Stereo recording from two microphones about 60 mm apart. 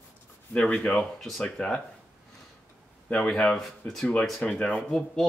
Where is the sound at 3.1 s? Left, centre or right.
Centre.